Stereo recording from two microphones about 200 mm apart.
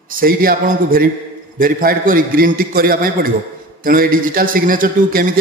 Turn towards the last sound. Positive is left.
turn(degrees=-45)  # may be behind; listen again after turning